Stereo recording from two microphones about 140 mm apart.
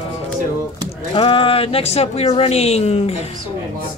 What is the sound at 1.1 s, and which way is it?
Speech, 40° left (ahead or behind).